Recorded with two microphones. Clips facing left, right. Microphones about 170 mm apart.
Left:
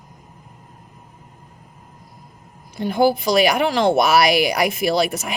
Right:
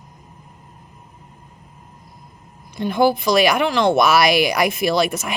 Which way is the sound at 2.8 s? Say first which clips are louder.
Even; 35° left (ahead or behind).